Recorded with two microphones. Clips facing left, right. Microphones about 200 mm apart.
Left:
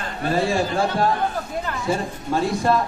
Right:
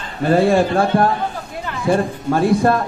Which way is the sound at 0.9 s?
55° right (ahead or behind).